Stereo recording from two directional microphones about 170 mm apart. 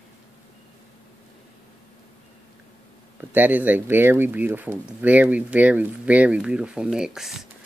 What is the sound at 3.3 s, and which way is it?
Speech, 10° right (ahead or behind).